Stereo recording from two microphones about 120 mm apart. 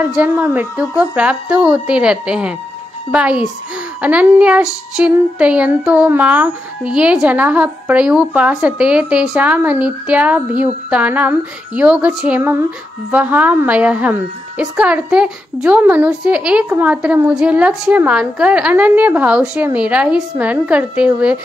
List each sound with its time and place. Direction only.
0.0 s child singing: 15° right (ahead or behind)